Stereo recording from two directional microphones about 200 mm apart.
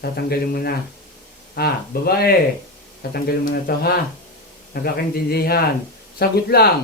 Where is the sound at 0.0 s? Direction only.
50° left (ahead or behind).